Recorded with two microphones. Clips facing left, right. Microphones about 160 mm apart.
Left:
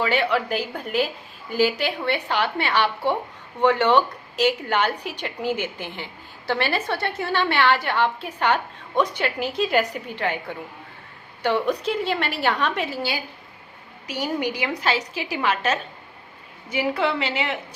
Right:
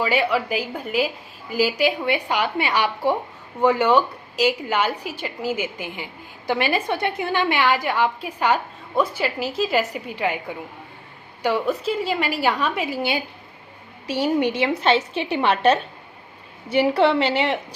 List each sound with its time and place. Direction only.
0.0 s a woman's voice: 10° right (ahead or behind)
11.4 s a woman's voice: 5° right (ahead or behind)
13.0 s a woman's voice: 20° right (ahead or behind)